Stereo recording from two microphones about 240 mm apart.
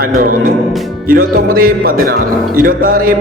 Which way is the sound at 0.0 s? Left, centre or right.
Right.